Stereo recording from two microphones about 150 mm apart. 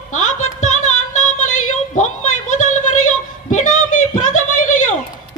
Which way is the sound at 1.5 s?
55° left (ahead or behind).